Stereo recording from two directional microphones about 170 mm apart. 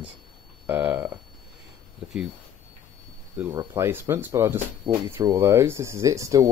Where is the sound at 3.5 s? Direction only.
20° right (ahead or behind).